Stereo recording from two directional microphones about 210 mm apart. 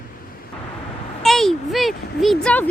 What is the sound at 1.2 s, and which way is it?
Speech, centre (ahead or behind).